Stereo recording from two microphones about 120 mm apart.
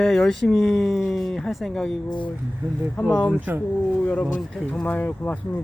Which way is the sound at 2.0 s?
40° left (ahead or behind).